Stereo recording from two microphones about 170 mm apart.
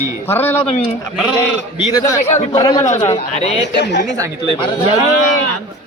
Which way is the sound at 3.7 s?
90° left.